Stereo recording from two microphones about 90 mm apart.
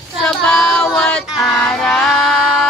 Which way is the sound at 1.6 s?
10° left (ahead or behind).